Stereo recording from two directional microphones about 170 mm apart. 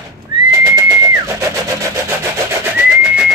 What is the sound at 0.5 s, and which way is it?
Vehicle, 15° right (ahead or behind).